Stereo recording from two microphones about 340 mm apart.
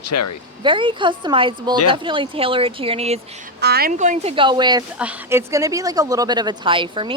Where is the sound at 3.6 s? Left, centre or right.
Right.